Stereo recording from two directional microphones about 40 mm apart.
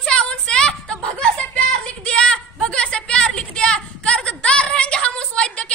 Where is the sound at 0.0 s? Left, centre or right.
Centre.